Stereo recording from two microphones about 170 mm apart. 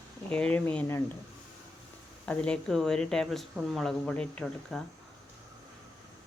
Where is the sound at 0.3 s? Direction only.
5° left (ahead or behind).